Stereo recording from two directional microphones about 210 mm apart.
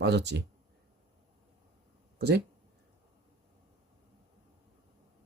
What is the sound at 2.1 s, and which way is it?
Speech, 50° right (ahead or behind).